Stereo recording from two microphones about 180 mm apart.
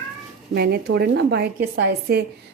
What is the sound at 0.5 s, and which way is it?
A woman's voice, 60° right (ahead or behind).